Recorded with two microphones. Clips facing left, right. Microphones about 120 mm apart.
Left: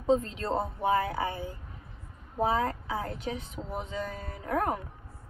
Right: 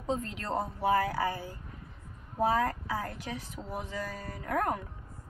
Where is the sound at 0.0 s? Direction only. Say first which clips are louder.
Left 7 dB; 35° left (ahead or behind).